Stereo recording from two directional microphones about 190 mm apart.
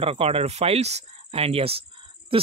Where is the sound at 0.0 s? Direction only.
30° right (ahead or behind).